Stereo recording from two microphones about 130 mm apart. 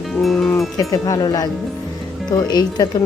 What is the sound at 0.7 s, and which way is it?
Speech, 25° left (ahead or behind).